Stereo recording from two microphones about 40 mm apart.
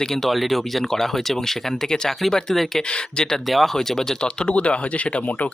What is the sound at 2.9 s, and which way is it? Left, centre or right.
Speech, left.